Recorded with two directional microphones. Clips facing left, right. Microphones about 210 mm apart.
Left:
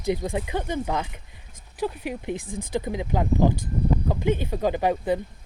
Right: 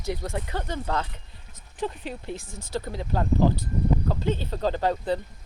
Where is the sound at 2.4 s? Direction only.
55° left (ahead or behind).